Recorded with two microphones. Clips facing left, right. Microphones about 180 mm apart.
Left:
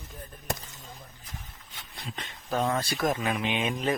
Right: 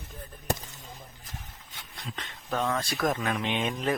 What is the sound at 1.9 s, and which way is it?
Speech, 10° left (ahead or behind).